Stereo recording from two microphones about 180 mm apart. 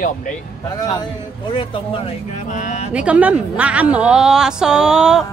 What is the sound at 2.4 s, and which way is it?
Speech, 45° left (ahead or behind).